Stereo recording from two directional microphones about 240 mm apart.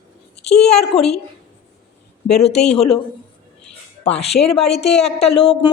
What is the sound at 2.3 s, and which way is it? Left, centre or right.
Speech, left.